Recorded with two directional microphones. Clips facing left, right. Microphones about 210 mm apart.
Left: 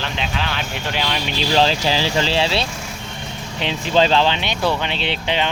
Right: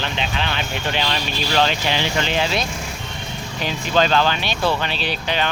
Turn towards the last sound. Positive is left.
turn(degrees=25)  # may be behind; listen again after turning